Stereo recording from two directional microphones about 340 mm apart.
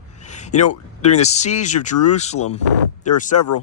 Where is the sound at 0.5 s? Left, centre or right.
Left.